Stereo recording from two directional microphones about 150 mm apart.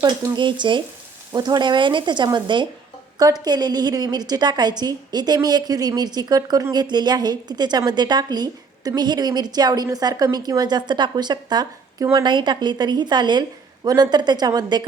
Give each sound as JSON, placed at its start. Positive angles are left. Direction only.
{"t": 0.3, "sound": "a woman's voice", "side_deg": -30}